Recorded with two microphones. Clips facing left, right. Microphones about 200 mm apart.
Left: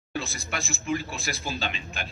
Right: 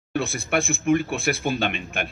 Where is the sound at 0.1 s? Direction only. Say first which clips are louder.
Right 9 dB; 55° right (ahead or behind).